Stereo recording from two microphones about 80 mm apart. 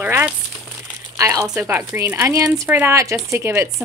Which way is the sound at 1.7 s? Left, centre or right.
Right.